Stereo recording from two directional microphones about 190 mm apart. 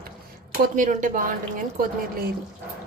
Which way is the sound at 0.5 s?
40° right (ahead or behind).